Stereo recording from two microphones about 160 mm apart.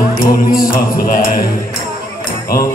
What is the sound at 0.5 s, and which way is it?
Music, 65° left (ahead or behind).